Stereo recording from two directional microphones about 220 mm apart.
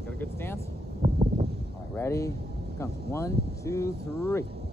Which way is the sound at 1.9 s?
15° left (ahead or behind).